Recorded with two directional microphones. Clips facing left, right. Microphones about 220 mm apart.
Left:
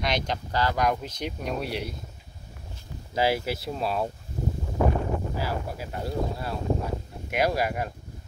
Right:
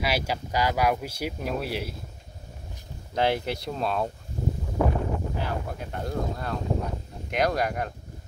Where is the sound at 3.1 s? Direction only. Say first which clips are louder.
Even; 5° left (ahead or behind).